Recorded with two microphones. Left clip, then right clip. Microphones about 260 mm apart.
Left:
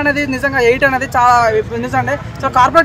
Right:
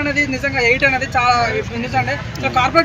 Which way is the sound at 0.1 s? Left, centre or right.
Centre.